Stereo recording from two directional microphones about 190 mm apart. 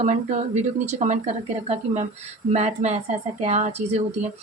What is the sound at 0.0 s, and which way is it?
A woman's voice, 40° right (ahead or behind).